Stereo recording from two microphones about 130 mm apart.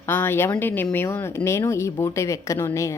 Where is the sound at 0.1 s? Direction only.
15° left (ahead or behind).